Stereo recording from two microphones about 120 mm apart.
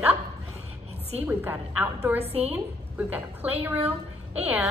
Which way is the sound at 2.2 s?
55° right (ahead or behind).